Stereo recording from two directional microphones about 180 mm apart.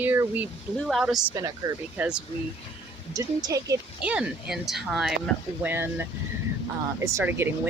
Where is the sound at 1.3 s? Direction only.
20° right (ahead or behind).